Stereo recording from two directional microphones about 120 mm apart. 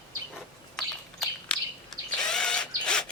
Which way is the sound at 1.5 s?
10° left (ahead or behind).